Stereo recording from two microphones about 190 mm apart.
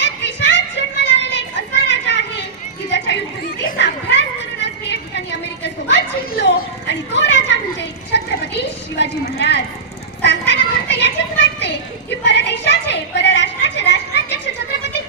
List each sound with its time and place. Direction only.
0.0 s music: 65° left (ahead or behind)
1.5 s children playing: 65° left (ahead or behind)
2.9 s music: 65° left (ahead or behind)
3.7 s a sound: 65° left (ahead or behind)
10.2 s children playing: 65° left (ahead or behind)
12.2 s a sound: 65° left (ahead or behind)